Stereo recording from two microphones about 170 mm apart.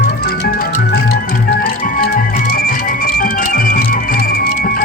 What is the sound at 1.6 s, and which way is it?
Music, 60° left (ahead or behind).